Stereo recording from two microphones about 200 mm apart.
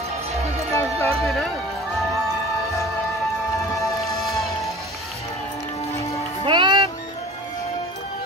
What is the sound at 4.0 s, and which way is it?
Music, centre (ahead or behind).